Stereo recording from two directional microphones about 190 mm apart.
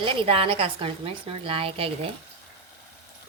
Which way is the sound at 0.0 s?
30° right (ahead or behind).